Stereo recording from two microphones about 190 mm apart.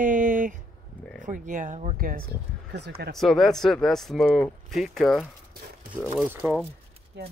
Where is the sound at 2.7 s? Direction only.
60° right (ahead or behind).